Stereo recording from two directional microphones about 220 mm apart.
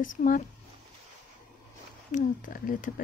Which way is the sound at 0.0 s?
35° left (ahead or behind).